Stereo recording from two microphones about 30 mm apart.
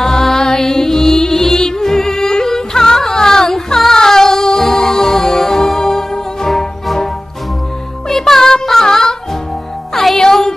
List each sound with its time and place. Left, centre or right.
0.0 s music: centre
8.1 s music: centre